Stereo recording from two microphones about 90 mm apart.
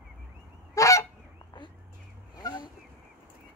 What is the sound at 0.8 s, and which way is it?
Goose, 35° left (ahead or behind).